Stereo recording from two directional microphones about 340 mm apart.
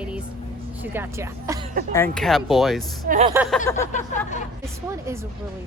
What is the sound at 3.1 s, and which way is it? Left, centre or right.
Speech, centre.